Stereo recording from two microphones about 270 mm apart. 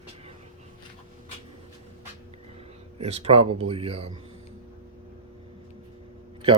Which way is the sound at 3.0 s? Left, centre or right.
Right.